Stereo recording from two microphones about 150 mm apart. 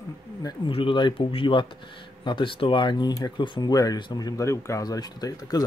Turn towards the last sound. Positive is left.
turn(degrees=25)  # may be behind; listen again after turning